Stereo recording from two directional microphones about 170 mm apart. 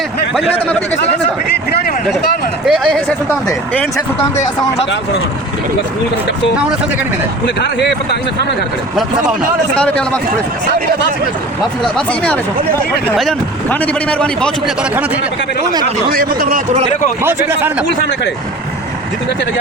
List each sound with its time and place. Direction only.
2.6 s a man's voice: centre (ahead or behind)
7.4 s speech: 90° left
11.9 s a man's voice: 5° left (ahead or behind)
15.8 s speech: 60° right (ahead or behind)